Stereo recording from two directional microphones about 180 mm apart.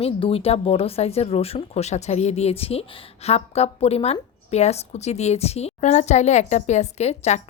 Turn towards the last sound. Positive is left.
turn(degrees=40)  # may be behind; listen again after turning